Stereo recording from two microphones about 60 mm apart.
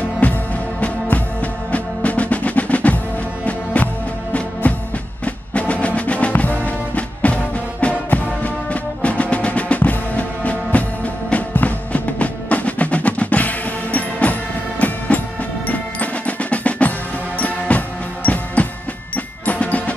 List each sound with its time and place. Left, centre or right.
0.2 s music: left